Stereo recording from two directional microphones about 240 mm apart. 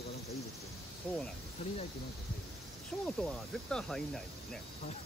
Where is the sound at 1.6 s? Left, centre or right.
Left.